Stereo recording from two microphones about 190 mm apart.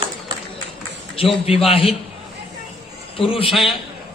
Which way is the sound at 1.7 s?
30° left (ahead or behind).